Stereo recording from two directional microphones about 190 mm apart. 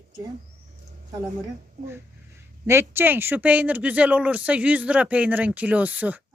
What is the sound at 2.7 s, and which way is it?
Speech, 10° right (ahead or behind).